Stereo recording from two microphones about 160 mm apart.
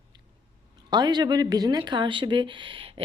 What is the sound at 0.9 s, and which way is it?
Speech, 25° right (ahead or behind).